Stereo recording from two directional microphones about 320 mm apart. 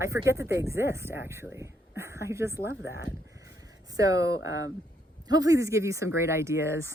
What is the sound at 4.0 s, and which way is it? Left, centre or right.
Speech, centre.